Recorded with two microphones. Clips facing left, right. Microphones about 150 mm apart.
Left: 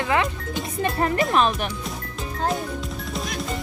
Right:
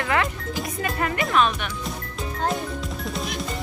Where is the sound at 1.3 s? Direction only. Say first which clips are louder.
Right 3 dB; 35° left (ahead or behind).